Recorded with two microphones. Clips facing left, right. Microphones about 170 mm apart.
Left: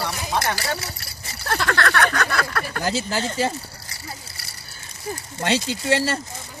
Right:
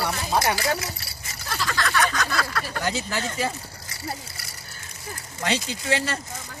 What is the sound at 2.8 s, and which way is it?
Speech, 35° left (ahead or behind).